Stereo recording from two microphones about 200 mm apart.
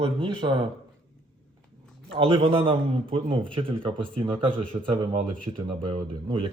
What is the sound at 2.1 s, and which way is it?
Speech, 25° right (ahead or behind).